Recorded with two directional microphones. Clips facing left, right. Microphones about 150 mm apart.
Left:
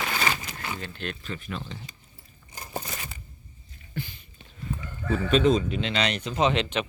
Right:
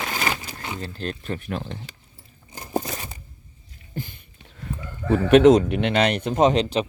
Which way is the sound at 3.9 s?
50° right (ahead or behind).